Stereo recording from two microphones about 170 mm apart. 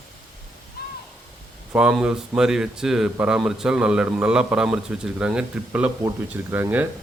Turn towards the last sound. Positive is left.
turn(degrees=-10)  # may be behind; listen again after turning